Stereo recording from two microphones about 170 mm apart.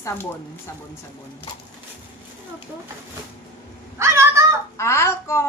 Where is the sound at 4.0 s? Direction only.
15° right (ahead or behind).